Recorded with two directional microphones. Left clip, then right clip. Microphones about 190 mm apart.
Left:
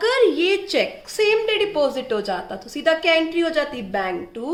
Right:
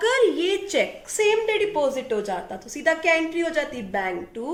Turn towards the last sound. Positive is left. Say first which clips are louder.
# left 2 dB
turn(degrees=35)  # may be behind; listen again after turning